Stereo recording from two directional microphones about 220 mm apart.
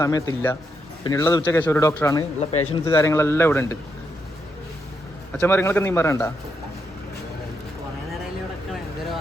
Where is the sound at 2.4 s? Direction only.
30° left (ahead or behind).